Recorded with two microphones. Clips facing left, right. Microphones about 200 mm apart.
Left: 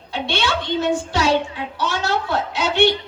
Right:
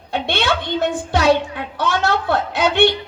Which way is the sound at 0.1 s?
55° right (ahead or behind).